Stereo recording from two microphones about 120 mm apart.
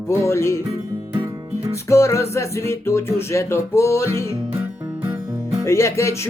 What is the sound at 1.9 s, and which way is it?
Speech, 25° left (ahead or behind).